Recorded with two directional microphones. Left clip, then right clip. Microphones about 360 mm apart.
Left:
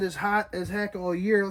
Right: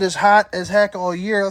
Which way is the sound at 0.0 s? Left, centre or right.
Centre.